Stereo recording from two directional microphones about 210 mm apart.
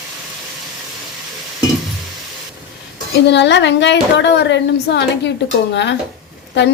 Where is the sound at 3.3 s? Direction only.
55° left (ahead or behind).